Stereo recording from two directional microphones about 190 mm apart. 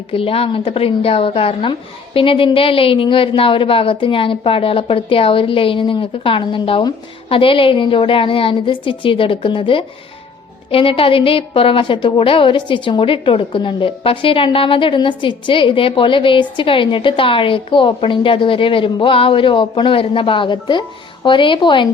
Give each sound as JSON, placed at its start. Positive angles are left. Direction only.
{"t": 0.1, "sound": "a woman's voice", "side_deg": 30}